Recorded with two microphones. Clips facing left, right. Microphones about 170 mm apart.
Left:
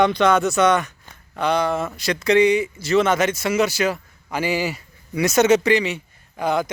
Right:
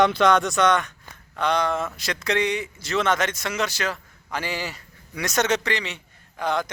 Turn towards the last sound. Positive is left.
turn(degrees=10)  # may be behind; listen again after turning